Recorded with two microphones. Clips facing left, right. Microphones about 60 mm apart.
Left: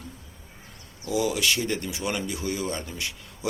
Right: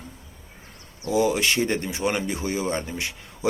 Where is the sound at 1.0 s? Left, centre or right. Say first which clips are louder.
Right 4 dB; right.